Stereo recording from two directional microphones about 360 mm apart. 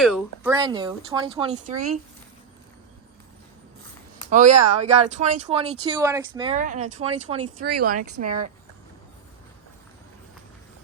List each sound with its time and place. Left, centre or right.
0.0 s speech: centre
0.5 s speech: centre
4.3 s speech: centre
7.7 s speech: right